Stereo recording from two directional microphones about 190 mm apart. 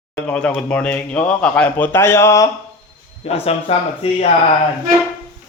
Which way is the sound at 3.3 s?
30° left (ahead or behind).